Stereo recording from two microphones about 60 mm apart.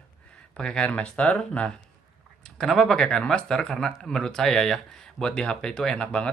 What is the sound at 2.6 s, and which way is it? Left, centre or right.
Speech, centre.